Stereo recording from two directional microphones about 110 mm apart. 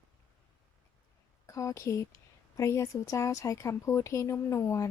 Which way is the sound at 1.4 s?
30° left (ahead or behind).